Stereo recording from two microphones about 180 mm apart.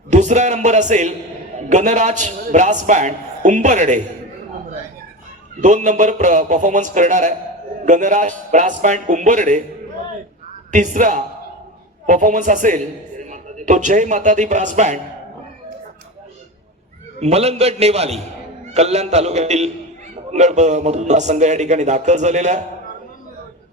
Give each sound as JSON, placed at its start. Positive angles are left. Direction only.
{"t": 0.1, "sound": "a man's voice", "side_deg": -40}
{"t": 5.5, "sound": "a man's voice", "side_deg": -45}
{"t": 10.7, "sound": "a man's voice", "side_deg": -45}
{"t": 17.2, "sound": "a man's voice", "side_deg": -35}